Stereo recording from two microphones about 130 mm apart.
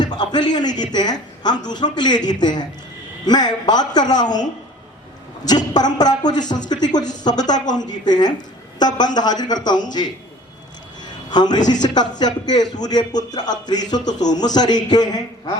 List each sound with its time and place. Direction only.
0.0 s speech: 35° left (ahead or behind)
5.7 s speech: 30° left (ahead or behind)
11.0 s a sound: 35° left (ahead or behind)
11.7 s speech: 35° left (ahead or behind)